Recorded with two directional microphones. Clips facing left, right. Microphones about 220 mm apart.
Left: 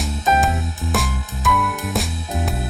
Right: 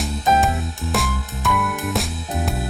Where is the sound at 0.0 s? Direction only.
Centre (ahead or behind).